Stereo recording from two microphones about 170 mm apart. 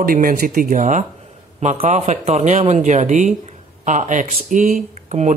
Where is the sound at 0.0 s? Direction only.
55° right (ahead or behind).